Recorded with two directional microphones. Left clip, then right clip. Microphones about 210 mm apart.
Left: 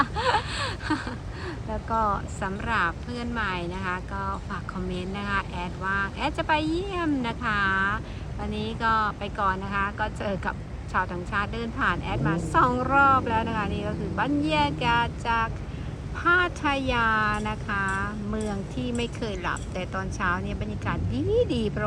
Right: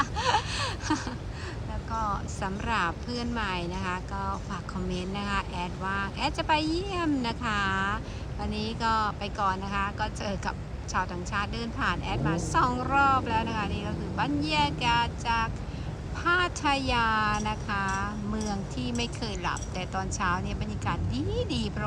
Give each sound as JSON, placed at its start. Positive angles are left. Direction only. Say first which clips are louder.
{"t": 0.0, "sound": "gasp", "louder": "left 3 dB", "side_deg": -10}
{"t": 1.9, "sound": "speech", "louder": "left 6 dB", "side_deg": -5}
{"t": 21.1, "sound": "speech", "louder": "left 7 dB", "side_deg": -45}